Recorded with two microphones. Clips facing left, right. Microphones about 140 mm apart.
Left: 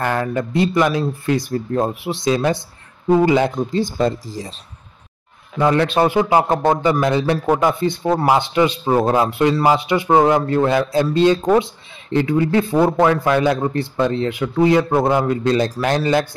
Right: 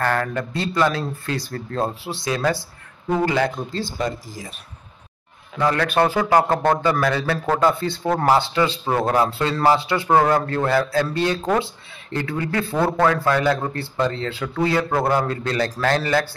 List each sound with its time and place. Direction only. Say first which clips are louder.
0.0 s a man's voice: left 2 dB; 15° left (ahead or behind)
4.0 s speech: left 6 dB; 35° left (ahead or behind)
5.6 s a man's voice: left 3 dB; 20° left (ahead or behind)